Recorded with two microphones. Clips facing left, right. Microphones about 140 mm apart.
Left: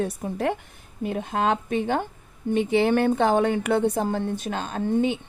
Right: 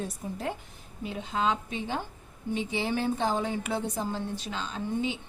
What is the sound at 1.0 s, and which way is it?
A woman's voice, 55° left (ahead or behind).